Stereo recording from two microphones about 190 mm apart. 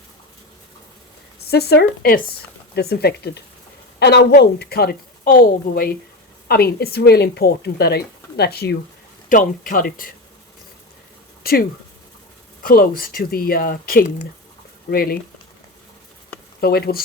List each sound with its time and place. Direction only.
1.5 s a woman's voice: 60° left (ahead or behind)
9.3 s a woman's voice: 45° left (ahead or behind)
12.6 s a woman's voice: 50° left (ahead or behind)
16.6 s speech: 55° left (ahead or behind)